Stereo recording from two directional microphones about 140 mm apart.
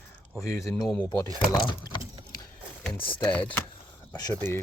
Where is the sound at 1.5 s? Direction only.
35° left (ahead or behind).